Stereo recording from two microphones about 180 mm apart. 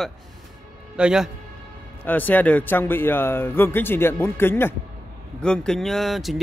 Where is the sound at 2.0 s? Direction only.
10° left (ahead or behind).